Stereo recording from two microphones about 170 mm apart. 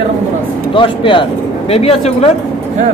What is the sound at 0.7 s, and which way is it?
Speech, 30° left (ahead or behind).